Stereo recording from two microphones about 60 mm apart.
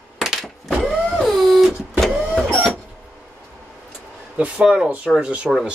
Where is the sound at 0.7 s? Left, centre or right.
Centre.